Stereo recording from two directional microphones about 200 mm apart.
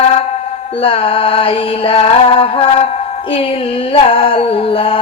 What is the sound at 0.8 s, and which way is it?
Female singing, 25° left (ahead or behind).